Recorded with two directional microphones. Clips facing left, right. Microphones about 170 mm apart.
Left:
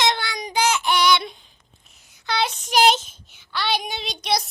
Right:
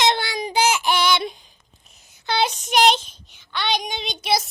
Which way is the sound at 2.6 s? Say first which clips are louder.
Left 1 dB; centre (ahead or behind).